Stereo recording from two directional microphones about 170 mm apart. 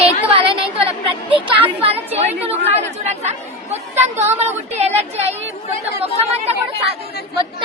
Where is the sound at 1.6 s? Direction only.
35° right (ahead or behind).